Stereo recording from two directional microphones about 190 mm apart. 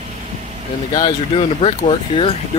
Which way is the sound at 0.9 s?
25° left (ahead or behind).